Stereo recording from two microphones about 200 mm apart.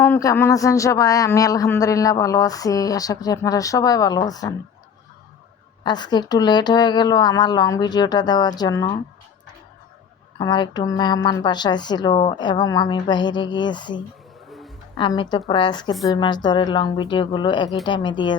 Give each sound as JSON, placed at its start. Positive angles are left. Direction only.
{"t": 0.0, "sound": "a man's voice", "side_deg": 15}
{"t": 5.8, "sound": "speech", "side_deg": 20}
{"t": 10.3, "sound": "speech", "side_deg": 20}